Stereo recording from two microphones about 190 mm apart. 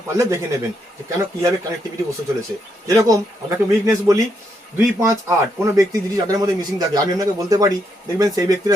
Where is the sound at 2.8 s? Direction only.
15° right (ahead or behind).